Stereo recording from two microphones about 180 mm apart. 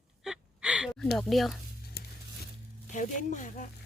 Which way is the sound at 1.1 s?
Centre (ahead or behind).